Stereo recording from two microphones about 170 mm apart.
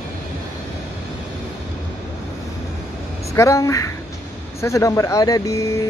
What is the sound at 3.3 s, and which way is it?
A woman's voice, 15° left (ahead or behind).